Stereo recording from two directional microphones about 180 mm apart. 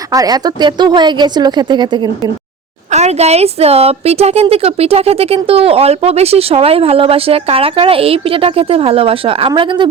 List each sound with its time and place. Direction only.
0.1 s speech: 20° right (ahead or behind)
2.9 s a woman's voice: 35° right (ahead or behind)